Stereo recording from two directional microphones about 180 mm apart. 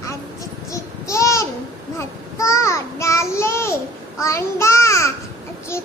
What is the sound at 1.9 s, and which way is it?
A child's voice, 15° left (ahead or behind).